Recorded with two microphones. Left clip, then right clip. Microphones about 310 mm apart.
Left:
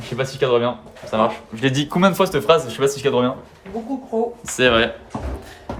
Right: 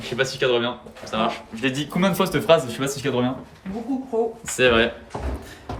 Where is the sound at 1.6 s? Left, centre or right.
Left.